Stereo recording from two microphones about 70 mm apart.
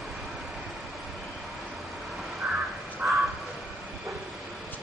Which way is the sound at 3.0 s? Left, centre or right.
Right.